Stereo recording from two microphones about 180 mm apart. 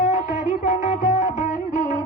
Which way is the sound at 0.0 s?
40° left (ahead or behind).